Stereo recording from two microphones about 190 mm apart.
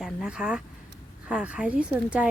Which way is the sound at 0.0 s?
5° right (ahead or behind).